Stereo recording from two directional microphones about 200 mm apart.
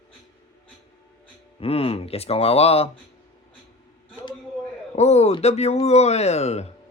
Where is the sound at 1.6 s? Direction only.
30° left (ahead or behind).